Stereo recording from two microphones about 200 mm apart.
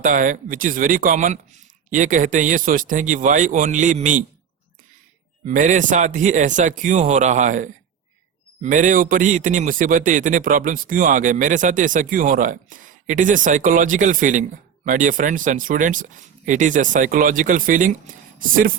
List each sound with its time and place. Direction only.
0.0 s a man's voice: 40° right (ahead or behind)
5.5 s a man's voice: 40° right (ahead or behind)